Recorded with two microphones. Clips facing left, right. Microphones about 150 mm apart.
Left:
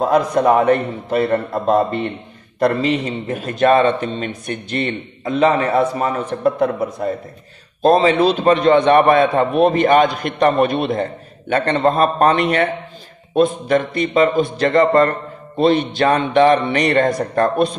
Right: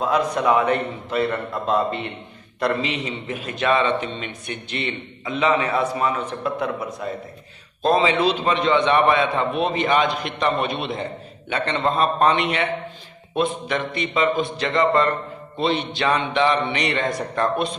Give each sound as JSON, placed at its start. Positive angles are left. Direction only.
{"t": 0.0, "sound": "a man's voice", "side_deg": 45}